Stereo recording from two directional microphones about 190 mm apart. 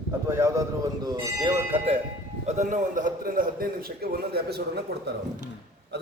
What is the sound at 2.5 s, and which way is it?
A man's voice, 40° right (ahead or behind).